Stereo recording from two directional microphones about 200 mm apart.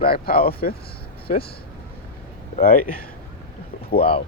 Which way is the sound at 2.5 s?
45° left (ahead or behind).